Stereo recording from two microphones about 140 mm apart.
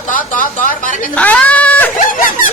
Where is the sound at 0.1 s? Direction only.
70° left (ahead or behind).